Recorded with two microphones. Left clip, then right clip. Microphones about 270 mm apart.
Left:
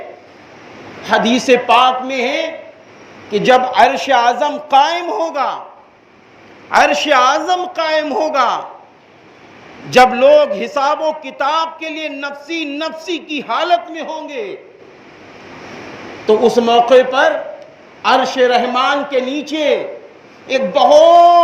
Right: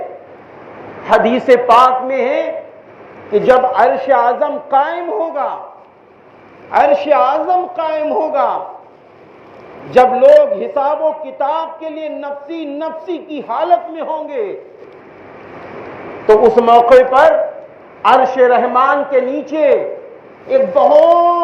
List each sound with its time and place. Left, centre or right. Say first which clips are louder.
1.0 s a man's voice: right 2 dB; left
6.7 s a man's voice: right 1 dB; left
9.9 s a man's voice: right 1 dB; left
16.2 s a man's voice: right 3 dB; left
18.0 s a man's voice: right 3 dB; left